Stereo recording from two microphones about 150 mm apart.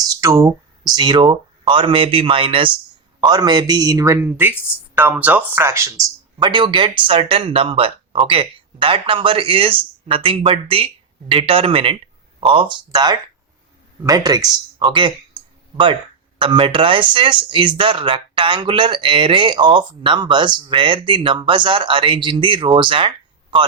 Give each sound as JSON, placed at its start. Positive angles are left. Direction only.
{"t": 0.1, "sound": "speech", "side_deg": -20}
{"t": 6.4, "sound": "speech", "side_deg": -30}
{"t": 16.4, "sound": "speech", "side_deg": -35}